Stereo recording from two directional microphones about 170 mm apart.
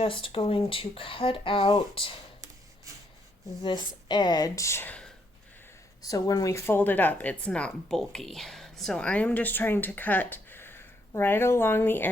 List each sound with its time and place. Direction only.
0.0 s speech: 30° left (ahead or behind)
3.6 s speech: 25° left (ahead or behind); by 5.1 s 5° left (ahead or behind)
6.0 s speech: 20° left (ahead or behind)